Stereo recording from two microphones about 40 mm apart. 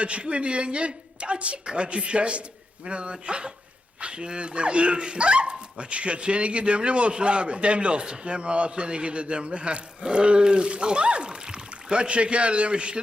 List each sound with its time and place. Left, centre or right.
0.0 s speech: right